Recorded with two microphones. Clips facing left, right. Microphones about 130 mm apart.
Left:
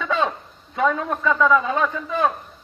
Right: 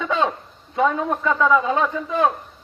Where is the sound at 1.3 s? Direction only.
5° right (ahead or behind).